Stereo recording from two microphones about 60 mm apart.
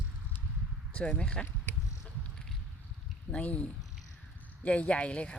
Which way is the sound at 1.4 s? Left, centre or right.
Left.